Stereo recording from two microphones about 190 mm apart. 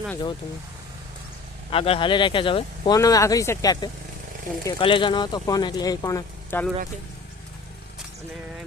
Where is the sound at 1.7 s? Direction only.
30° left (ahead or behind); by 6.6 s 15° left (ahead or behind).